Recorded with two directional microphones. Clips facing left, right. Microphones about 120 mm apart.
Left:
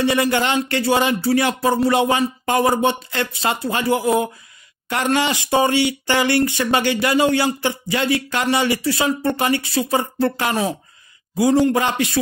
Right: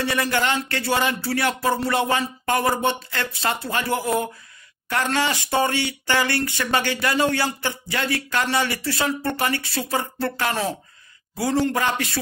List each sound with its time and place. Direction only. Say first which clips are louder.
0.0 s speech: left 5 dB; 20° left (ahead or behind)